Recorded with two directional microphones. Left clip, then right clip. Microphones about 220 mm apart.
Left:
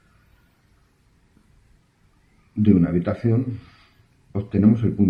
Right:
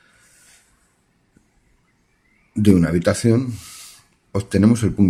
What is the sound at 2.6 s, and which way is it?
Speech, 50° right (ahead or behind).